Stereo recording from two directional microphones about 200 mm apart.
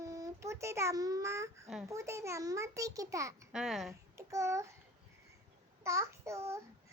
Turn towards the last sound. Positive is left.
turn(degrees=-15)  # may be behind; listen again after turning